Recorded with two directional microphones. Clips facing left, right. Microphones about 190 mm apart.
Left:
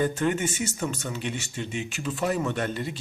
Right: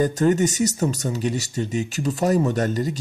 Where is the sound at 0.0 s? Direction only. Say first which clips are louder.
Right 6 dB; 40° right (ahead or behind).